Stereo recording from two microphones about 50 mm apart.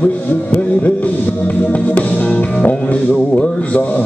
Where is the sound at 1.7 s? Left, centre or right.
Left.